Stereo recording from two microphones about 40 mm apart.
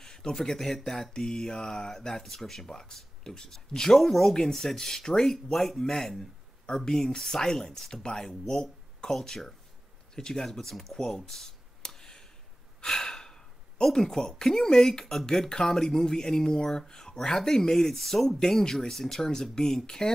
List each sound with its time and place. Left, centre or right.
0.0 s speech: centre
11.0 s a sound: centre
12.8 s sigh: centre
13.9 s speech: centre